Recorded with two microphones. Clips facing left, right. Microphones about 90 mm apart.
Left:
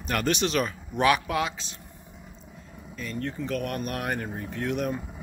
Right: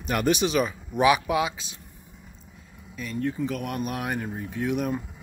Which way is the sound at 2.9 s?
5° right (ahead or behind).